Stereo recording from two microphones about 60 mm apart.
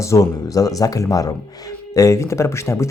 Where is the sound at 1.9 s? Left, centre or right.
Left.